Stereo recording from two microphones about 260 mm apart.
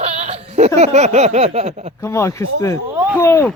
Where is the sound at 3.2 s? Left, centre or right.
Centre.